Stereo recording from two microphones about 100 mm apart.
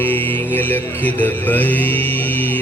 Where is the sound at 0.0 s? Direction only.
20° left (ahead or behind).